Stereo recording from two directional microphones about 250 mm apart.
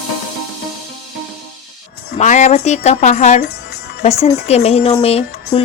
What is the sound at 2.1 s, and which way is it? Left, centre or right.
A woman's voice, left.